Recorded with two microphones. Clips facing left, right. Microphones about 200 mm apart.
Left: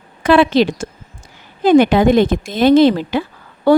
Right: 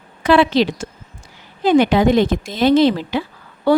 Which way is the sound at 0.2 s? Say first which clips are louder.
Left 2 dB; 50° left (ahead or behind).